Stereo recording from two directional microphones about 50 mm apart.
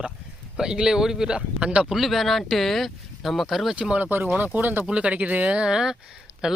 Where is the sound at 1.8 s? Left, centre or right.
Centre.